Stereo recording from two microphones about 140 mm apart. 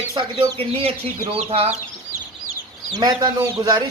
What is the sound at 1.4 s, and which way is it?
Speech, 45° right (ahead or behind).